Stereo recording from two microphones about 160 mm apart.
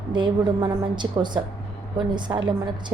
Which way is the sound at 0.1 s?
30° right (ahead or behind).